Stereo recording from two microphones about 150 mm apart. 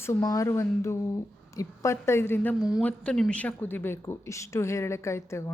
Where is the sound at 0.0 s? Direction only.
20° left (ahead or behind).